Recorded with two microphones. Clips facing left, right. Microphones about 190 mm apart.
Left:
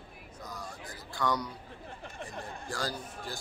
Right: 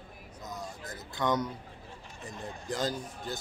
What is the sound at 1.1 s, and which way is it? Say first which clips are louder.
Speech: right 2 dB; 20° right (ahead or behind).